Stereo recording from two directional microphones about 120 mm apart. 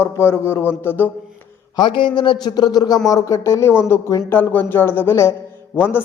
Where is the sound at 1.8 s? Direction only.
40° left (ahead or behind).